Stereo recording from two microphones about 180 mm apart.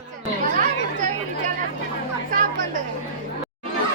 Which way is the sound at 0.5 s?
45° right (ahead or behind).